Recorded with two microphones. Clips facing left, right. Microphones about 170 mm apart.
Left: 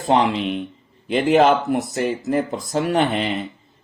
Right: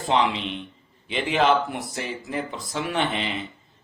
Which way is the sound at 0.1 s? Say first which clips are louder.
Left 5 dB; 45° left (ahead or behind).